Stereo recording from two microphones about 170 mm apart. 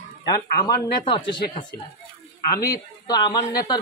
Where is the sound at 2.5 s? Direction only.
20° left (ahead or behind).